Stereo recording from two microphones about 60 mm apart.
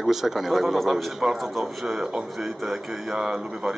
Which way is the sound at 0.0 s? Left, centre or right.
Centre.